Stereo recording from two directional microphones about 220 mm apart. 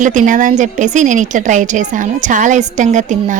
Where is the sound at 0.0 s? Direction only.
35° right (ahead or behind).